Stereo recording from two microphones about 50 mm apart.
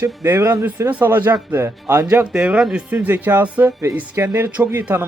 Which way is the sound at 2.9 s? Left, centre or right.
Right.